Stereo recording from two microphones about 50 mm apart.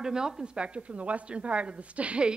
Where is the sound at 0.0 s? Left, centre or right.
Centre.